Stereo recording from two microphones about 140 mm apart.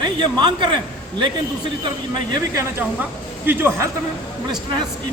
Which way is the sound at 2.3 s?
20° right (ahead or behind).